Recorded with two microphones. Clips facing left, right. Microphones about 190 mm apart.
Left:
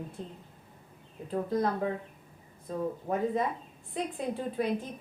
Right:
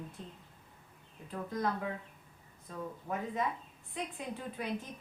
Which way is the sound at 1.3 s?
35° left (ahead or behind).